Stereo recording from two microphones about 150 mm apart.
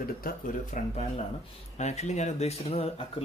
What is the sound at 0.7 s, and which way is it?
Speech, 55° left (ahead or behind).